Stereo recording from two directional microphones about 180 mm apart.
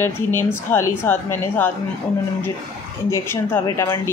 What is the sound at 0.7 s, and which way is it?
Speech, 15° left (ahead or behind).